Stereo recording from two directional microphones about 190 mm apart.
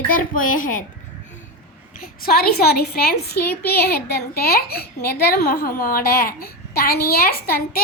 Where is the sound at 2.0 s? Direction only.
50° left (ahead or behind).